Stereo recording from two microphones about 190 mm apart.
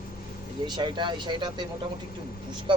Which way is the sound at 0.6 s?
25° right (ahead or behind).